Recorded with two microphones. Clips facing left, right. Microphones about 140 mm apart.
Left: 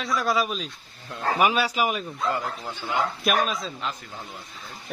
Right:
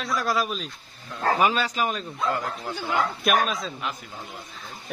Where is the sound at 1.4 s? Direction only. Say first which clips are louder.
Left 4 dB; 10° left (ahead or behind).